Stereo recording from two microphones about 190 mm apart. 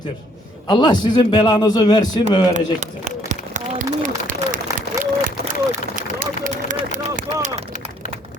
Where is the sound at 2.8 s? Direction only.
40° right (ahead or behind).